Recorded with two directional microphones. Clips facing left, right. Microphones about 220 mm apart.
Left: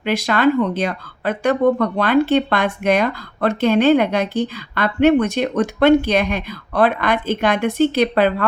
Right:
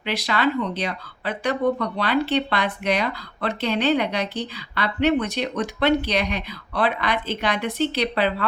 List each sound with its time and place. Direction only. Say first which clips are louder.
0.0 s speech: left 7 dB; 45° left (ahead or behind)